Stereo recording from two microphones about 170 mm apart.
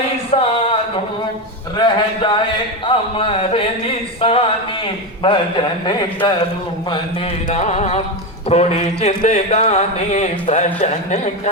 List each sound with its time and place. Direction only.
0.3 s a sound: 35° left (ahead or behind)
1.7 s a man's voice: 25° left (ahead or behind)
7.4 s music: 45° left (ahead or behind)
8.4 s speech: 40° left (ahead or behind)